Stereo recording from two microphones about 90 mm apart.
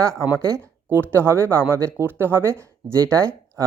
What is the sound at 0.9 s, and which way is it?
Speech, 25° right (ahead or behind).